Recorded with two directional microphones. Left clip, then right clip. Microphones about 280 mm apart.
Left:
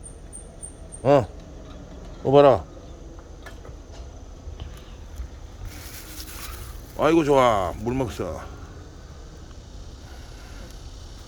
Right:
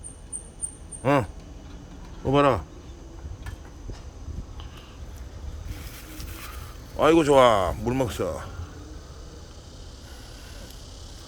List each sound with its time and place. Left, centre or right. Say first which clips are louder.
1.0 s a sound: left 5 dB; centre
2.3 s speech: left 6 dB; centre
6.9 s speech: right 1 dB; centre